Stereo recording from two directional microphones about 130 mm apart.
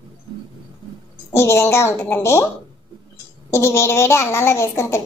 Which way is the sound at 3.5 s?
20° left (ahead or behind).